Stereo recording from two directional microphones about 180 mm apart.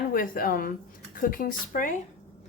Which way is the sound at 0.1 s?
55° left (ahead or behind).